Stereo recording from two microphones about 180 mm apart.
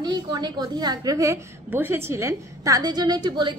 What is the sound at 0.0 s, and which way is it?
A woman's voice, 25° right (ahead or behind).